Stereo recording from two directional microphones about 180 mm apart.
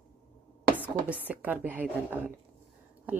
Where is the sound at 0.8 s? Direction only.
10° right (ahead or behind).